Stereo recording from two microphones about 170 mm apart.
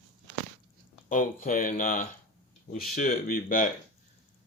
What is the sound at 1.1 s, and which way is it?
Speech, 50° left (ahead or behind).